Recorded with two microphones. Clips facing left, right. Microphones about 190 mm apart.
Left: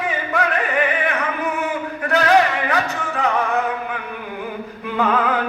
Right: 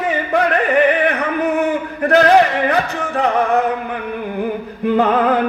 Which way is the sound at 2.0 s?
55° right (ahead or behind).